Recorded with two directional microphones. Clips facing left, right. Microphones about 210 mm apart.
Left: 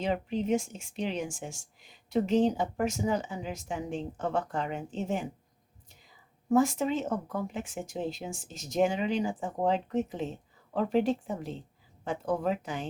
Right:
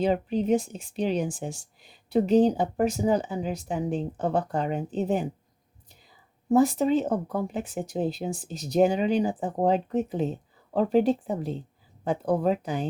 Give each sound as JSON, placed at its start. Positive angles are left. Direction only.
{"t": 0.0, "sound": "speech", "side_deg": -35}
{"t": 6.5, "sound": "speech", "side_deg": -35}